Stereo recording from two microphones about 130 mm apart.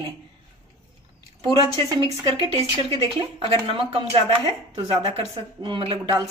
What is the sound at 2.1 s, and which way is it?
A woman's voice, 35° right (ahead or behind).